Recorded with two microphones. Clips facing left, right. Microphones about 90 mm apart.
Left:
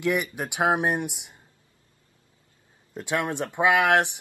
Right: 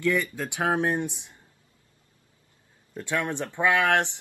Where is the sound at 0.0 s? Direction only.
20° left (ahead or behind).